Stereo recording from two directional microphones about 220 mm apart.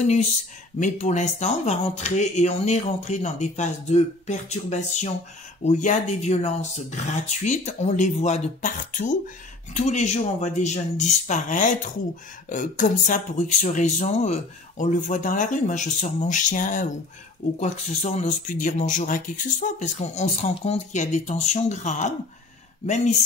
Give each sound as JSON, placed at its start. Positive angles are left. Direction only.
{"t": 0.0, "sound": "speech", "side_deg": 30}